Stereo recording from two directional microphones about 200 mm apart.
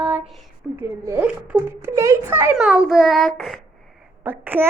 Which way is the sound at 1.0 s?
10° right (ahead or behind).